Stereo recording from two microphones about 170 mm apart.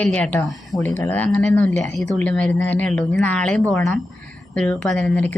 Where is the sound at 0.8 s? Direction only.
10° left (ahead or behind).